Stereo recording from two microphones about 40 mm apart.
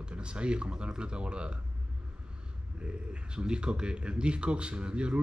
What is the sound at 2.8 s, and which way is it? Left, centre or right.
Speech, centre.